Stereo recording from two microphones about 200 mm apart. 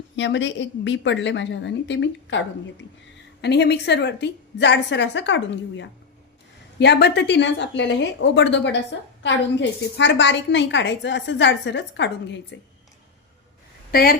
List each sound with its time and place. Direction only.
0.2 s a woman's voice: 65° left (ahead or behind)
3.4 s a woman's voice: 55° left (ahead or behind)
13.9 s a woman's voice: 50° left (ahead or behind)